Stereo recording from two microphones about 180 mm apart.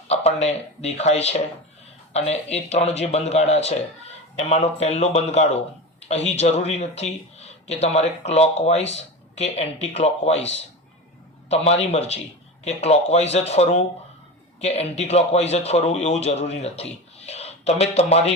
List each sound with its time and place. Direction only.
0.1 s speech: 35° left (ahead or behind)